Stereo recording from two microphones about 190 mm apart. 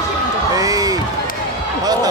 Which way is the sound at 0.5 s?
20° right (ahead or behind).